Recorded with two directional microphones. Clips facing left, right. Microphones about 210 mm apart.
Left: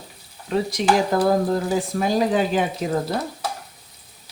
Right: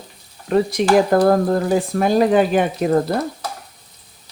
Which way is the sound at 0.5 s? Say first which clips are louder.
Right 5 dB; 55° right (ahead or behind).